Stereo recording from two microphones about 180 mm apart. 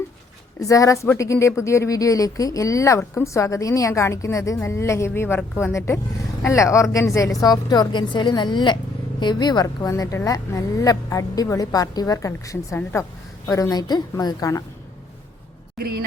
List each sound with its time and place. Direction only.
0.6 s a woman's voice: 20° left (ahead or behind)